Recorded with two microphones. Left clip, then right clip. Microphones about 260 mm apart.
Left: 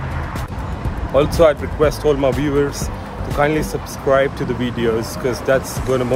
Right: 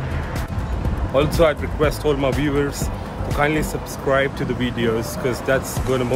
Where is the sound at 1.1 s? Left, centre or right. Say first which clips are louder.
Left 4 dB; centre.